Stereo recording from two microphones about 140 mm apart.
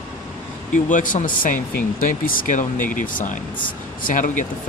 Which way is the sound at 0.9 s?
70° left (ahead or behind).